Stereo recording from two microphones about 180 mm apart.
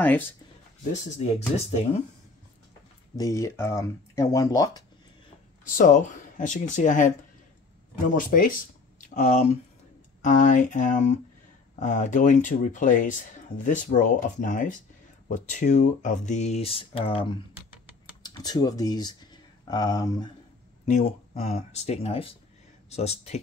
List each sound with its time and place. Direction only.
1.1 s speech: 40° left (ahead or behind)
3.2 s speech: 15° left (ahead or behind)
5.8 s speech: 45° left (ahead or behind); by 20.2 s 20° left (ahead or behind)
20.8 s speech: 35° left (ahead or behind)